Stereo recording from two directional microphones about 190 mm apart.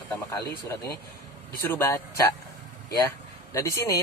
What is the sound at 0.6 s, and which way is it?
A man's voice, 15° left (ahead or behind).